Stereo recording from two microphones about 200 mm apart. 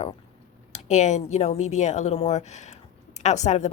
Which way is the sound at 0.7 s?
35° left (ahead or behind).